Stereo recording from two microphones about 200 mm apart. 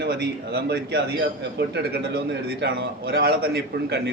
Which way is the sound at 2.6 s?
55° right (ahead or behind).